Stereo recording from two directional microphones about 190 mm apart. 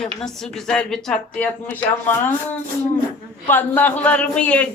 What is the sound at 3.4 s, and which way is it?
A woman's voice, 10° left (ahead or behind).